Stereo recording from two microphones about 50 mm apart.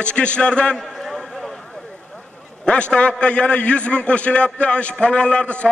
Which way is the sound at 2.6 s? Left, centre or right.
Left.